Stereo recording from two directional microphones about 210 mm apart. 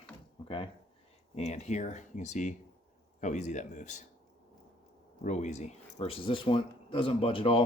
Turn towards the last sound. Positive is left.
turn(degrees=25)  # may be behind; listen again after turning